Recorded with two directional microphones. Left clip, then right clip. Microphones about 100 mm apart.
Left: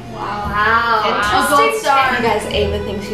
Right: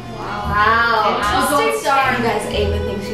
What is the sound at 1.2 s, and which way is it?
A woman's voice, 15° left (ahead or behind).